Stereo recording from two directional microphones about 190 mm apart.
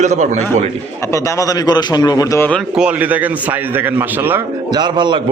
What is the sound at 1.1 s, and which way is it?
A man's voice, 20° left (ahead or behind).